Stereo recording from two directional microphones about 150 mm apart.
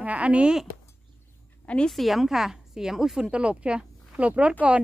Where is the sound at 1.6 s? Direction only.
5° left (ahead or behind).